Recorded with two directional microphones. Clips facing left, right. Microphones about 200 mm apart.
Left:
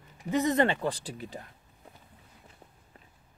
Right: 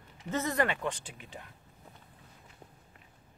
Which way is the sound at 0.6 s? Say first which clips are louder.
Left 5 dB; 35° left (ahead or behind).